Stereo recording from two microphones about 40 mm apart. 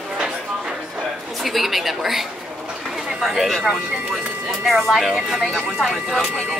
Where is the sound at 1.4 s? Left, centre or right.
Centre.